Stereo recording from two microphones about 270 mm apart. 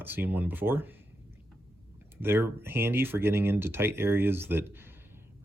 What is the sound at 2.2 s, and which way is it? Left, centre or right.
Speech, centre.